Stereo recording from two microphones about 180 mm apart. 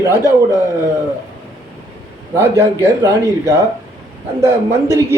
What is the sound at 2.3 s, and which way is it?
A man's voice, 15° right (ahead or behind).